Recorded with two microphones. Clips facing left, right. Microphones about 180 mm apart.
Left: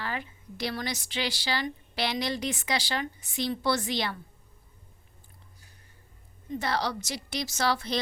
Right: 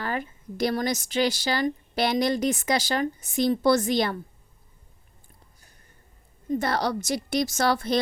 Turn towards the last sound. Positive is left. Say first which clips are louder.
# right 5 dB
turn(degrees=-50)  # may be behind; listen again after turning